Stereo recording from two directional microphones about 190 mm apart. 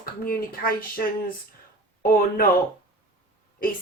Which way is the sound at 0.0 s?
50° left (ahead or behind).